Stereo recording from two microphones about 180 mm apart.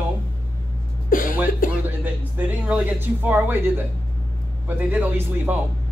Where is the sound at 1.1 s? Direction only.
50° left (ahead or behind).